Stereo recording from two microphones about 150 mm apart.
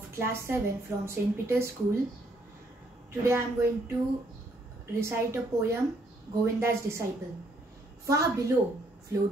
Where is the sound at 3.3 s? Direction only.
15° right (ahead or behind).